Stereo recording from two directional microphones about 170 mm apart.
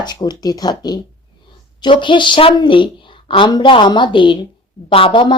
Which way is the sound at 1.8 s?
30° left (ahead or behind).